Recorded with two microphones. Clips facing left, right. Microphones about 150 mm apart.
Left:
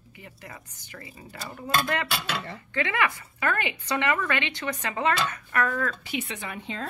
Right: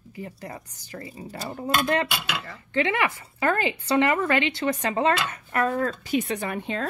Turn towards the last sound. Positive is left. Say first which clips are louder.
# right 6 dB
turn(degrees=-60)  # may be behind; listen again after turning